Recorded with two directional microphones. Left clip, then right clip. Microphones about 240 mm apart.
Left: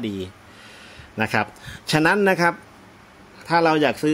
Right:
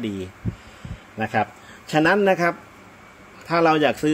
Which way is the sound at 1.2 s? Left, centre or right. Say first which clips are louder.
Left 1 dB; left.